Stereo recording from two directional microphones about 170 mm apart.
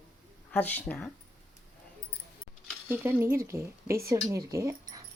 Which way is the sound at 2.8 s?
10° right (ahead or behind).